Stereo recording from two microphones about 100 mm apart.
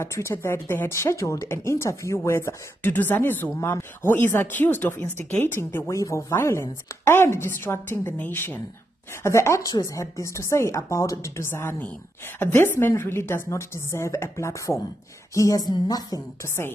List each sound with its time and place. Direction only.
0.0 s speech: 30° left (ahead or behind)